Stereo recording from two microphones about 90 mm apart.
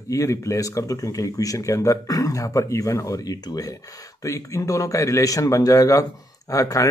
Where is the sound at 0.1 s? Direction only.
35° left (ahead or behind).